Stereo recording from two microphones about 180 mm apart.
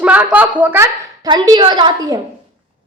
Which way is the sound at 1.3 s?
25° right (ahead or behind).